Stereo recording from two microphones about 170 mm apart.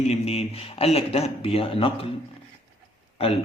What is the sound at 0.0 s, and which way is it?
Speech, 40° left (ahead or behind).